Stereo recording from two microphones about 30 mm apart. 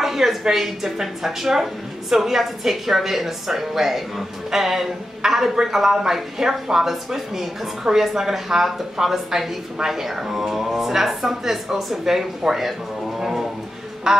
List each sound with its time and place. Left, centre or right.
0.0 s a woman's voice: centre